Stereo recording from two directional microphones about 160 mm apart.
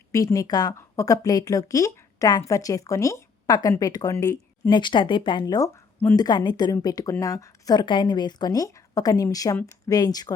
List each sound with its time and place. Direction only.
0.1 s a woman's voice: 20° left (ahead or behind)